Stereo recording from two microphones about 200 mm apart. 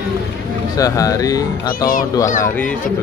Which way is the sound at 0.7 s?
15° left (ahead or behind).